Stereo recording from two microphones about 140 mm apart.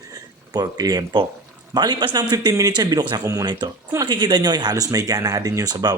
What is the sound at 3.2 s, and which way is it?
Speech, 20° right (ahead or behind).